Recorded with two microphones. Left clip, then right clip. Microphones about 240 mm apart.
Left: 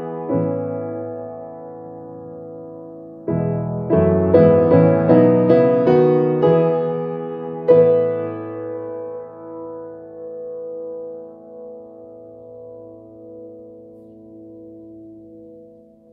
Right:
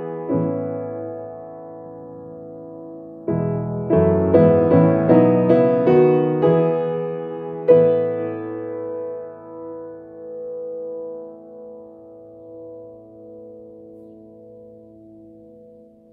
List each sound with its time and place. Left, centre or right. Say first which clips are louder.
0.0 s music: left 1 dB; centre